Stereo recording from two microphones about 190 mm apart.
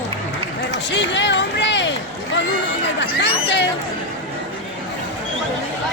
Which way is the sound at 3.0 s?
65° left (ahead or behind).